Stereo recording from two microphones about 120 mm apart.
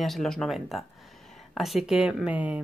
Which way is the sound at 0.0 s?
Centre (ahead or behind).